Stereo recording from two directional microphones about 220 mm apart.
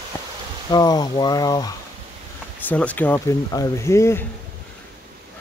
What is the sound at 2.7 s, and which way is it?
Speech, 5° left (ahead or behind).